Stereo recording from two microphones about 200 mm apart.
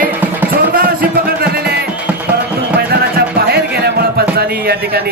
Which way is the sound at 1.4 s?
50° right (ahead or behind).